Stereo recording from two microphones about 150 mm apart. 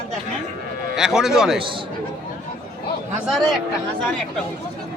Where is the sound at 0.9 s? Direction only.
5° right (ahead or behind).